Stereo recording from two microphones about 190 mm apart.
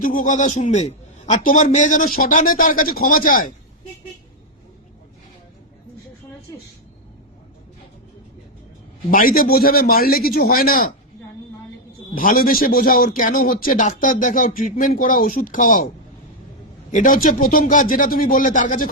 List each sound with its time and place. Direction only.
0.0 s a man's voice: 45° left (ahead or behind)
9.0 s a man's voice: 50° left (ahead or behind)
12.1 s a man's voice: 45° left (ahead or behind)
16.9 s a man's voice: 45° left (ahead or behind)